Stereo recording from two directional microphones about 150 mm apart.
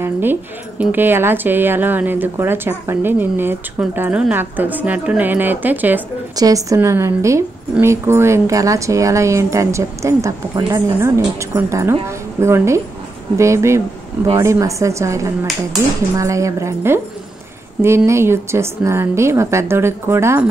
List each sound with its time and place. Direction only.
0.0 s speech: 15° right (ahead or behind)
6.3 s a woman's voice: 25° right (ahead or behind)